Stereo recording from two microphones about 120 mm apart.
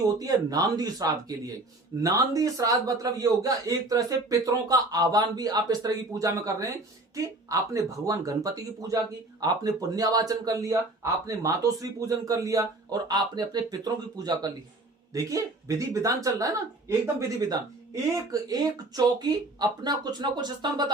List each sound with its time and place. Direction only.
0.2 s a man's voice: 30° right (ahead or behind)